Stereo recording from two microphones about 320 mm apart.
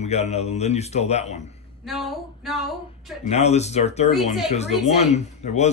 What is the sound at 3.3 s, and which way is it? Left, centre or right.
Speech, centre.